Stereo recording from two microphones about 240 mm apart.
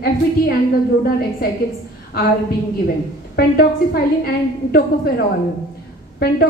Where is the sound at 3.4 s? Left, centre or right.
Left.